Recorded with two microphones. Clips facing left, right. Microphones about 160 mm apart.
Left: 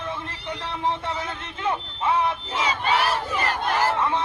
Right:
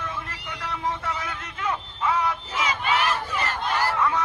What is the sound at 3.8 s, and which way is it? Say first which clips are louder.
Crowd: right 1 dB; 25° left (ahead or behind).